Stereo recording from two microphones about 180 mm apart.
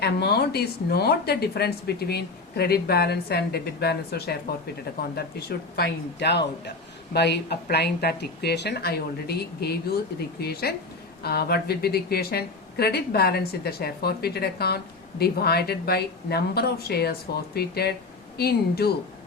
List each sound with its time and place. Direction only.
0.0 s speech: 60° left (ahead or behind)